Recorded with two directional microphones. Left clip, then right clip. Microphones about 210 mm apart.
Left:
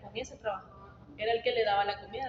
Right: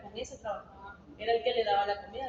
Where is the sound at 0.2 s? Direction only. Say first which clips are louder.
Left 2 dB; 40° left (ahead or behind).